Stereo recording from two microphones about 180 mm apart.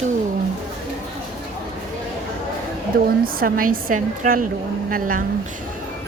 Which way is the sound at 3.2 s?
55° right (ahead or behind).